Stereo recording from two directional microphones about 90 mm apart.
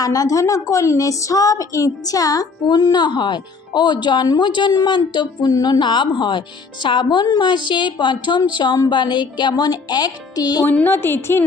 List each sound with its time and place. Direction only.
0.0 s a woman's voice: 40° left (ahead or behind)
5.8 s a woman's voice: 60° left (ahead or behind)
10.7 s a woman's voice: 25° left (ahead or behind)